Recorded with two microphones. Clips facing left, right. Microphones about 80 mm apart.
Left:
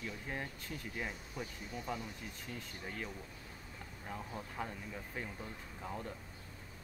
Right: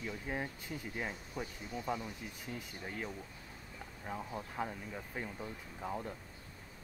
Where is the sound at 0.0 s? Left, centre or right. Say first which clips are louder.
Right 3 dB; centre.